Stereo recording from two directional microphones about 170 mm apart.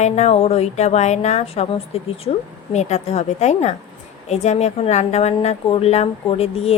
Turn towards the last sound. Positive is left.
turn(degrees=35)  # may be behind; listen again after turning